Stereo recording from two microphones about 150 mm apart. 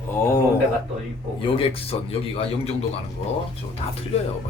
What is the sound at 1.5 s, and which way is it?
Speech, 40° left (ahead or behind).